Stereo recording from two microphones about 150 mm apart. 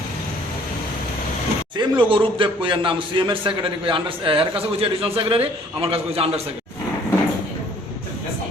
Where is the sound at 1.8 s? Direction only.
35° right (ahead or behind).